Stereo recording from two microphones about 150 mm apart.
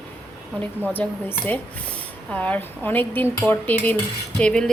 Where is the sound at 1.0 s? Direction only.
10° left (ahead or behind).